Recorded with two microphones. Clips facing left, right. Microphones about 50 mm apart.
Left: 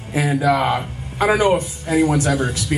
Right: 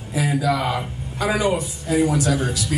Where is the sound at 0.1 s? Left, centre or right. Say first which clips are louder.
Left 4 dB; left.